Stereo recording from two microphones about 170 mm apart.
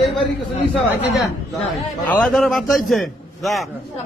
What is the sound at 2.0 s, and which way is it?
A man's voice, 5° left (ahead or behind).